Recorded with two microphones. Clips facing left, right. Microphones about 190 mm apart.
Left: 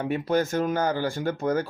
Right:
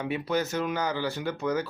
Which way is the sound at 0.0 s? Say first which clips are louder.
Left 4 dB; 50° left (ahead or behind).